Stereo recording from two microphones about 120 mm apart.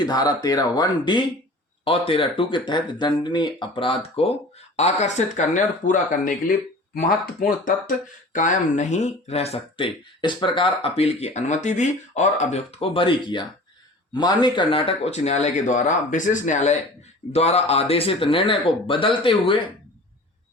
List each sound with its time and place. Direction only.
0.0 s speech: 35° left (ahead or behind)
1.8 s speech: 50° left (ahead or behind)
4.8 s speech: 70° left (ahead or behind); by 6.3 s 90° left
8.3 s speech: 90° left
17.3 s speech: 60° left (ahead or behind)